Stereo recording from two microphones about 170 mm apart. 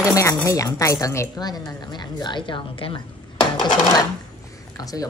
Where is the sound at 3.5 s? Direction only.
25° left (ahead or behind).